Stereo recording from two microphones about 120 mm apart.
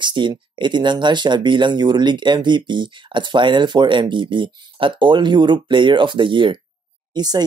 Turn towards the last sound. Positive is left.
turn(degrees=-35)  # may be behind; listen again after turning